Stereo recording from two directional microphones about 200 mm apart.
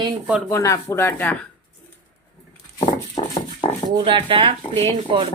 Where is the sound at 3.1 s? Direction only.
20° left (ahead or behind).